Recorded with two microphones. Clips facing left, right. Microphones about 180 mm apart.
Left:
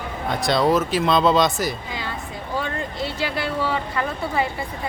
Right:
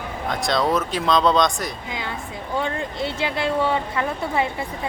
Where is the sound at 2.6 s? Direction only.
25° right (ahead or behind).